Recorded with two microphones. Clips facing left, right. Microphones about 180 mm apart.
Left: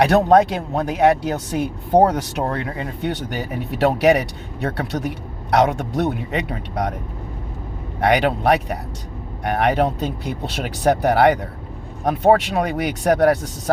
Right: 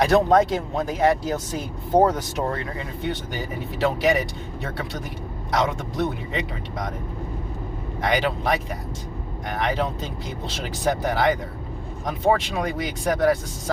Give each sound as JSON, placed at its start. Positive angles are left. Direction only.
{"t": 0.0, "sound": "speech", "side_deg": 65}
{"t": 8.0, "sound": "speech", "side_deg": 70}